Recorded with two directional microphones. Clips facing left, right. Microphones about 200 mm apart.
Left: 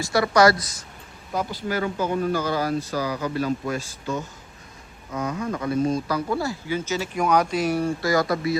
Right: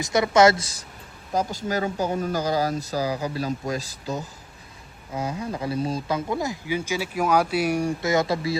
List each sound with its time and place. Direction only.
0.0 s a woman's voice: 20° right (ahead or behind)
1.3 s a woman's voice: 45° right (ahead or behind); by 8.4 s 25° right (ahead or behind)